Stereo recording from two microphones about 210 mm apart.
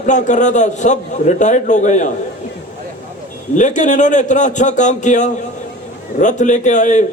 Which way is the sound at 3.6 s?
35° left (ahead or behind).